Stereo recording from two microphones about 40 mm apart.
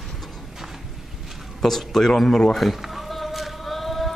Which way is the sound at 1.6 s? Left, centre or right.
Centre.